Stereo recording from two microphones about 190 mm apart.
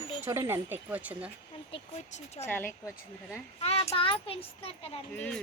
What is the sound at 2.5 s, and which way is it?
Speech, 10° left (ahead or behind).